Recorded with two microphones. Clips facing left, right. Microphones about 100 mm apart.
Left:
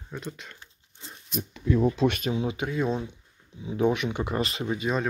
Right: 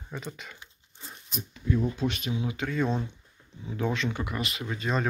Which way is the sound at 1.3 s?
80° left.